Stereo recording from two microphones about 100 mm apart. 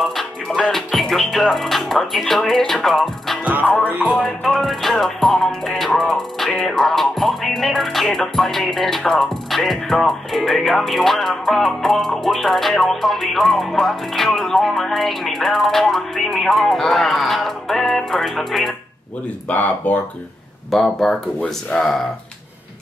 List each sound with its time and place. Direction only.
0.0 s music: centre (ahead or behind)
3.6 s music: 15° left (ahead or behind)
4.1 s music: 5° left (ahead or behind)
19.5 s speech: 15° left (ahead or behind)
20.7 s music: centre (ahead or behind)
21.4 s speech: 10° left (ahead or behind)